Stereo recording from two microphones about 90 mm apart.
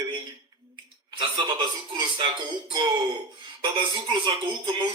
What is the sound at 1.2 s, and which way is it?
Speech, 60° right (ahead or behind).